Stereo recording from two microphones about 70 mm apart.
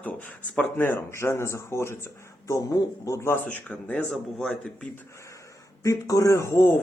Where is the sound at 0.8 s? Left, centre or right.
Left.